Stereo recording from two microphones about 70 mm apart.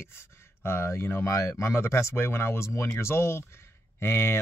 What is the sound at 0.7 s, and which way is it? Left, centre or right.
Speech, left.